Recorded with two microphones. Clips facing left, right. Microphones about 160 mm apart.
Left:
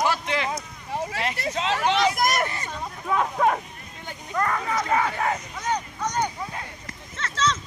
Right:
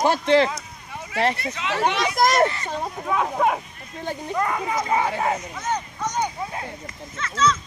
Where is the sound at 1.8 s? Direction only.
35° right (ahead or behind).